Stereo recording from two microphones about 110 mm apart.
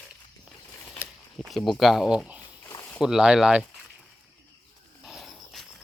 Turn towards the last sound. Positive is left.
turn(degrees=0)  # may be behind; listen again after turning